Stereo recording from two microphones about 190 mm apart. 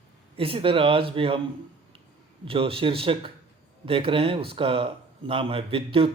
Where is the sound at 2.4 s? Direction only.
30° right (ahead or behind).